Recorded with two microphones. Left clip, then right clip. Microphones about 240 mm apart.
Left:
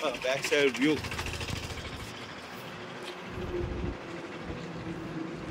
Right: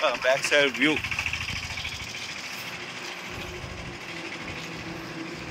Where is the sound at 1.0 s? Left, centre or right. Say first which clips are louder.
Right 7 dB; left.